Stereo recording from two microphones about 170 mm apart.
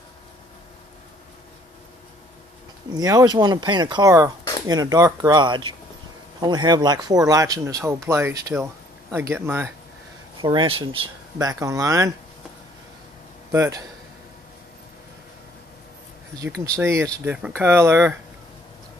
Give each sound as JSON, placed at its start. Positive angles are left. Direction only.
{"t": 2.9, "sound": "speech", "side_deg": -20}
{"t": 10.4, "sound": "speech", "side_deg": -30}
{"t": 13.5, "sound": "a man's voice", "side_deg": -20}
{"t": 16.4, "sound": "speech", "side_deg": -15}